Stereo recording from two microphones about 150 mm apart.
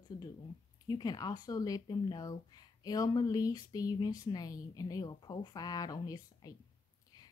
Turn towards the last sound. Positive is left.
turn(degrees=25)  # may be behind; listen again after turning